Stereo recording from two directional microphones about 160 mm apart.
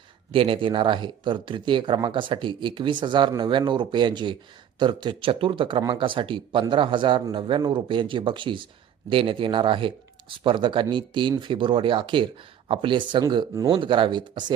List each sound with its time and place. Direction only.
0.3 s speech: 35° right (ahead or behind)
13.7 s speech: 30° right (ahead or behind)